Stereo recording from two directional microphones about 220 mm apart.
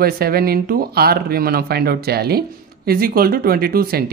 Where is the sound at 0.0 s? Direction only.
45° right (ahead or behind).